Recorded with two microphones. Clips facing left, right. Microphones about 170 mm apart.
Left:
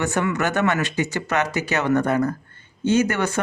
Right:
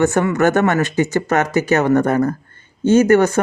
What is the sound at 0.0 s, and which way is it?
Speech, 45° right (ahead or behind).